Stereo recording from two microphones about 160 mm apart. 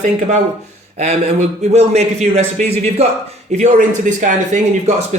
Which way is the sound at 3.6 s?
50° right (ahead or behind).